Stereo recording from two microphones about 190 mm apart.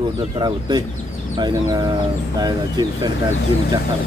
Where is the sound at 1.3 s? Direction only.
20° right (ahead or behind).